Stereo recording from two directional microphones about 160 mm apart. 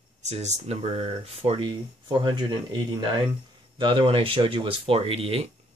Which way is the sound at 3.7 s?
30° right (ahead or behind).